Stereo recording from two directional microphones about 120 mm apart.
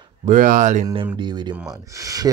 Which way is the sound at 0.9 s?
45° right (ahead or behind).